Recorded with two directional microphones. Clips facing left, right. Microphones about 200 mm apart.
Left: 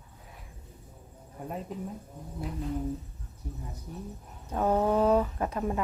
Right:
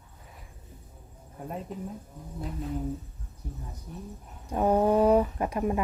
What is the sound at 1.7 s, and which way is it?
Speech, centre (ahead or behind).